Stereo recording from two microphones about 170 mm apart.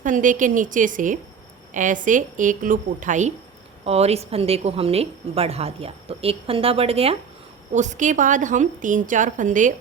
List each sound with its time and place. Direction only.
0.0 s a woman's voice: 50° right (ahead or behind)
7.7 s a woman's voice: 45° right (ahead or behind)